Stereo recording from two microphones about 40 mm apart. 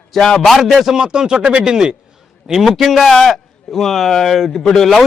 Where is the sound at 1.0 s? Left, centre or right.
Centre.